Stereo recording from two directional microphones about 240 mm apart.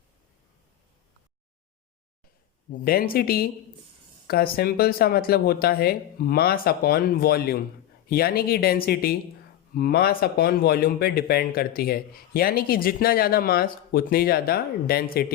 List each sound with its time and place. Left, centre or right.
2.8 s speech: left